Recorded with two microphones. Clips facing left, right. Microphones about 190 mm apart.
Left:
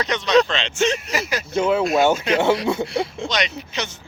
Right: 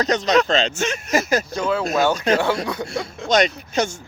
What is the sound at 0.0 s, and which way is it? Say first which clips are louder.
Speech: even; 40° right (ahead or behind).